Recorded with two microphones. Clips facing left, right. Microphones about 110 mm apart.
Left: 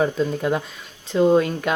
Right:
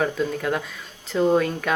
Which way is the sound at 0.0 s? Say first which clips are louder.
Left 3 dB; 20° left (ahead or behind).